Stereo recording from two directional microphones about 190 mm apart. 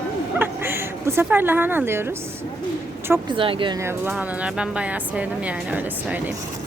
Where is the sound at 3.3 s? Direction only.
25° right (ahead or behind).